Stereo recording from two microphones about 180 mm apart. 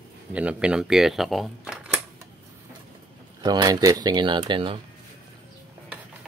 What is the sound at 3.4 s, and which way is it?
Speech, 20° right (ahead or behind).